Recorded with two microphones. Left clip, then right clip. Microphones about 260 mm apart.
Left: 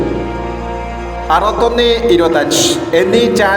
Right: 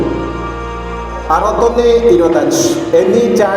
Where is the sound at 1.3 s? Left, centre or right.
Left.